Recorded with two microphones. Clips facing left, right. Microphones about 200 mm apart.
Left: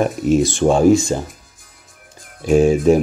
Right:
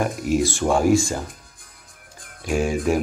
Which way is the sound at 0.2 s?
20° left (ahead or behind).